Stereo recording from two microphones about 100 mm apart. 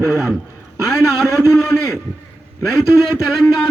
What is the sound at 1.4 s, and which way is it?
Speech, 30° right (ahead or behind).